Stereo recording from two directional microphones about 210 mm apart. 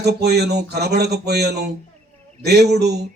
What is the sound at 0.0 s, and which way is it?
A man's voice, 50° right (ahead or behind).